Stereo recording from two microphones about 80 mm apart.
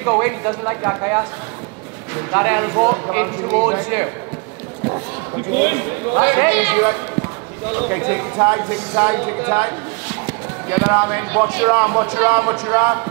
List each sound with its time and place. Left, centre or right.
0.0 s speech: right